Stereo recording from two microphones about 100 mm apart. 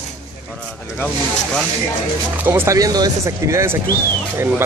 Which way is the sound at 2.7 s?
40° right (ahead or behind).